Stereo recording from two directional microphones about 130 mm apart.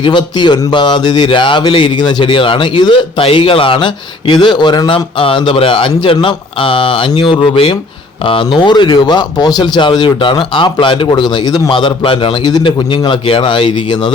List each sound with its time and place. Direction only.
0.0 s speech: 35° left (ahead or behind)